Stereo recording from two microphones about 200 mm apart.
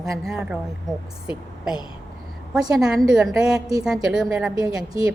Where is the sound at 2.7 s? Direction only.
5° right (ahead or behind).